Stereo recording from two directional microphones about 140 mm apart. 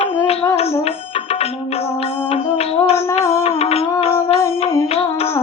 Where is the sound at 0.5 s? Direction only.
45° left (ahead or behind).